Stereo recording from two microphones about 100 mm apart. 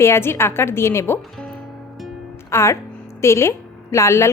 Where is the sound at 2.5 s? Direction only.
30° left (ahead or behind).